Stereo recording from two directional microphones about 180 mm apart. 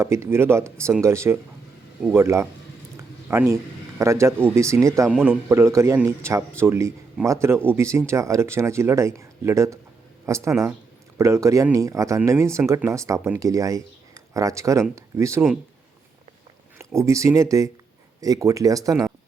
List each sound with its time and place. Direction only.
0.0 s speech: 15° right (ahead or behind)
16.7 s speech: 15° right (ahead or behind)